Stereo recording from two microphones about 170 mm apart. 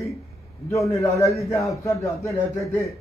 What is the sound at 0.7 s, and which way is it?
A man's voice, 15° left (ahead or behind).